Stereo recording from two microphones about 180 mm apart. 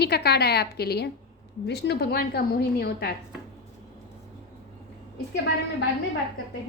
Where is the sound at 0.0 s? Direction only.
65° left (ahead or behind).